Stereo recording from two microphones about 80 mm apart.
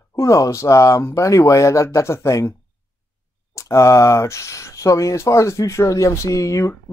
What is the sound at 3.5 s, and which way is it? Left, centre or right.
Speech, left.